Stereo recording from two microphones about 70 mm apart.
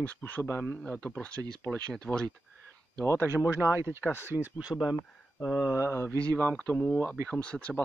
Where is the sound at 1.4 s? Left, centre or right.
Right.